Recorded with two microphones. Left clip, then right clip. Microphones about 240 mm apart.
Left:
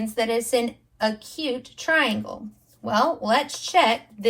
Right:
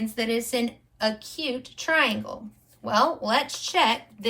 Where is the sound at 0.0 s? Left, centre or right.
Centre.